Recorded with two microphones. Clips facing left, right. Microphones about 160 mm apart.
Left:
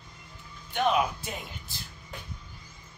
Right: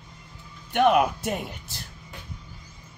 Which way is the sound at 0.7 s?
60° right (ahead or behind).